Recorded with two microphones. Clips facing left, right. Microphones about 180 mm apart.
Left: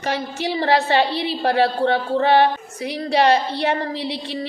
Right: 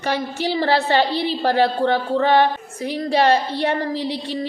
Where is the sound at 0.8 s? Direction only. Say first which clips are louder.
Right 1 dB; 45° right (ahead or behind).